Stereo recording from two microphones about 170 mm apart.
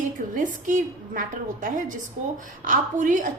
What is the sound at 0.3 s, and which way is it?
Speech, 50° right (ahead or behind).